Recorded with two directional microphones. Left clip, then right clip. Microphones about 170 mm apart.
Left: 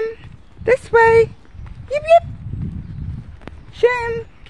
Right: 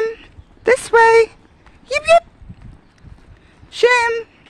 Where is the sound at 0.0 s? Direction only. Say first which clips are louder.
Right 3 dB; 35° right (ahead or behind).